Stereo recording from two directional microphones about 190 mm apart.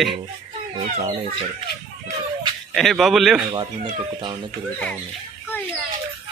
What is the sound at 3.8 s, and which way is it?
Speech, 30° right (ahead or behind).